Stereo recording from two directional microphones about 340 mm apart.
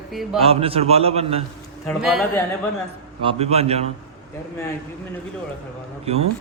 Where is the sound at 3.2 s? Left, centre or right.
Centre.